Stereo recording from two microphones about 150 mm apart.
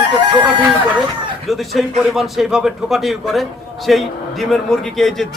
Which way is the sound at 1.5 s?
Centre (ahead or behind).